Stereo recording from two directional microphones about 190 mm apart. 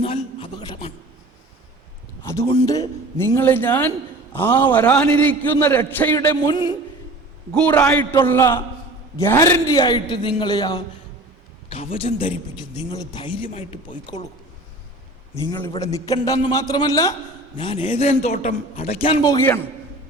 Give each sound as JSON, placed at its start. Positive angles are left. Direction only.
{"t": 0.0, "sound": "a sound", "side_deg": 30}
{"t": 2.2, "sound": "a sound", "side_deg": 15}
{"t": 2.5, "sound": "a man's voice", "side_deg": 20}
{"t": 6.1, "sound": "a man's voice", "side_deg": 20}
{"t": 7.5, "sound": "a man's voice", "side_deg": 10}
{"t": 15.4, "sound": "a man's voice", "side_deg": 20}
{"t": 19.2, "sound": "a man's voice", "side_deg": 15}